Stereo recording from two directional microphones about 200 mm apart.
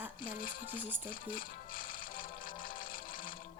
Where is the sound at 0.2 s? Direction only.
45° left (ahead or behind).